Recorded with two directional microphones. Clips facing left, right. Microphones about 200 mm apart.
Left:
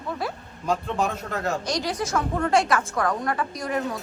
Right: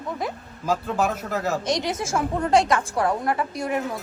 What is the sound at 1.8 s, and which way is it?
A woman's voice, 25° right (ahead or behind).